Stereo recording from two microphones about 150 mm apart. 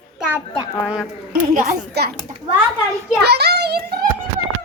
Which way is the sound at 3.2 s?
90° right.